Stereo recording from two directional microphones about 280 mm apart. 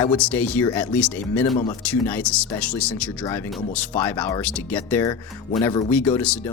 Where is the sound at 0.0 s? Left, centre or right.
Centre.